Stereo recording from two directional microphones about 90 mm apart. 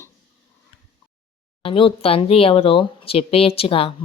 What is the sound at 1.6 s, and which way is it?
Speech, 75° left (ahead or behind).